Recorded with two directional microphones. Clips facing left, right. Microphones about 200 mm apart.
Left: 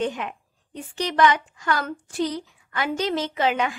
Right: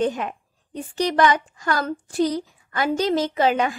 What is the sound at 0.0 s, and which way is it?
A woman's voice, 40° right (ahead or behind).